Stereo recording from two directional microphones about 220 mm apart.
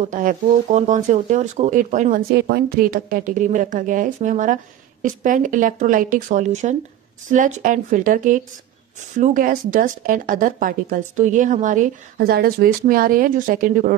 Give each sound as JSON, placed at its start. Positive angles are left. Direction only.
{"t": 0.0, "sound": "speech", "side_deg": -35}